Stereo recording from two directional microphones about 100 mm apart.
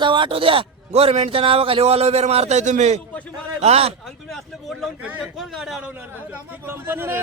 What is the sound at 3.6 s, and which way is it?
Speech, 90° right.